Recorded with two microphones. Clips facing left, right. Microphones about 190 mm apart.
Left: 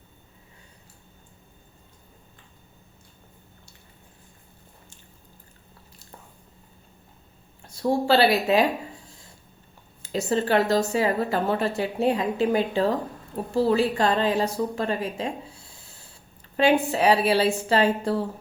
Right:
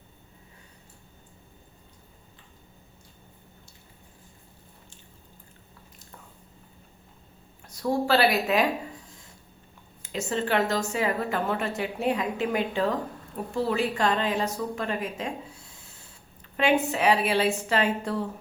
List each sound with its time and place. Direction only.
7.6 s a woman's voice: 30° left (ahead or behind)
9.0 s a sound: 30° left (ahead or behind)
10.0 s a woman's voice: 35° left (ahead or behind)